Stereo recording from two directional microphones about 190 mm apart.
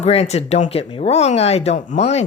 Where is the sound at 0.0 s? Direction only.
35° left (ahead or behind).